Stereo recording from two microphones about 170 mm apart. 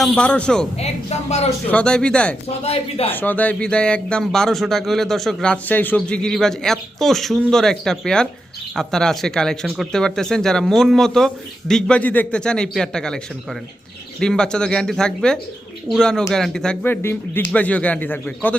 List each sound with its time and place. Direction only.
0.0 s speech: 5° left (ahead or behind)
0.8 s a woman's voice: 40° left (ahead or behind)
1.7 s speech: 5° left (ahead or behind)
2.6 s speech: 40° left (ahead or behind)
3.1 s speech: 10° left (ahead or behind)
14.2 s speech: 5° left (ahead or behind)